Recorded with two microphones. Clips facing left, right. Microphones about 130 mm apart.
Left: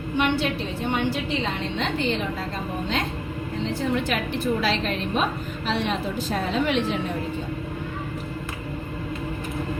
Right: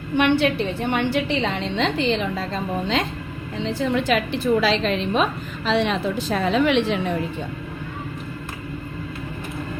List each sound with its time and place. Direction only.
0.2 s a woman's voice: 65° right (ahead or behind)
1.7 s a woman's voice: 90° right
3.7 s a woman's voice: 90° right